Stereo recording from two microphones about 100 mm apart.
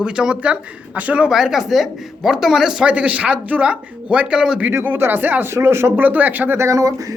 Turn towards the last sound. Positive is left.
turn(degrees=-35)  # may be behind; listen again after turning